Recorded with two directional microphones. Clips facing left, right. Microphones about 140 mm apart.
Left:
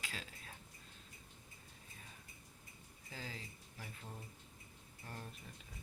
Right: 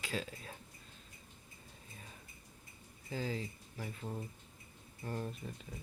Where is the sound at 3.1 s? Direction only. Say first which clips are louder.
Right 11 dB; 30° right (ahead or behind).